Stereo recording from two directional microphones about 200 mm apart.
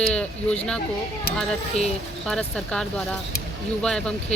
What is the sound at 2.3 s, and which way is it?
Speech, 5° left (ahead or behind).